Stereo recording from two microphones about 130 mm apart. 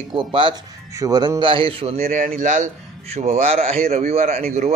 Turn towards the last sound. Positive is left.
turn(degrees=-55)  # may be behind; listen again after turning